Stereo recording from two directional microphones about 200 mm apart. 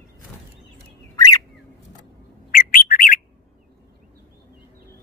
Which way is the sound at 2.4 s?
45° left (ahead or behind).